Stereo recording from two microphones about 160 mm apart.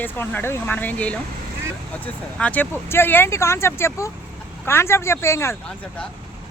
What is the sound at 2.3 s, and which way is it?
Speech, 10° left (ahead or behind).